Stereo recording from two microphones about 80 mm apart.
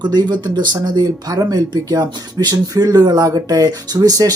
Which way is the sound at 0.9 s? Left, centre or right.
Right.